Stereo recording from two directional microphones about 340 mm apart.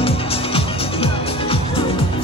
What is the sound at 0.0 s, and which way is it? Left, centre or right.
Music, centre.